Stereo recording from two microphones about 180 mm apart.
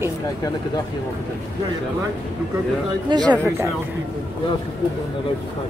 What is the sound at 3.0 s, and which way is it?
Speech, 25° right (ahead or behind).